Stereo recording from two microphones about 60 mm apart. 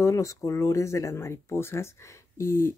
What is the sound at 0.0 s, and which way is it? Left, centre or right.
Speech, left.